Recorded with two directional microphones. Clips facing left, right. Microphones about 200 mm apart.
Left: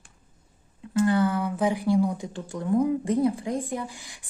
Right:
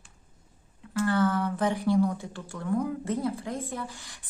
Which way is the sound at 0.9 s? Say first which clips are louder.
Left 3 dB; 20° left (ahead or behind).